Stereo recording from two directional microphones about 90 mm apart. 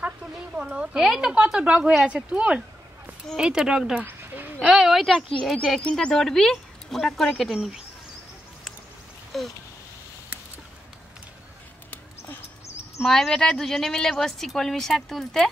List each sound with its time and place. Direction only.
0.6 s a woman's voice: 10° right (ahead or behind)
5.7 s a woman's voice: 10° left (ahead or behind)
9.3 s a woman's voice: 5° left (ahead or behind)
12.2 s dog: 25° left (ahead or behind)
13.0 s a woman's voice: 5° left (ahead or behind)